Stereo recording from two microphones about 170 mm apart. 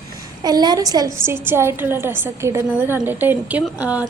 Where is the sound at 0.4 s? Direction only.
25° right (ahead or behind).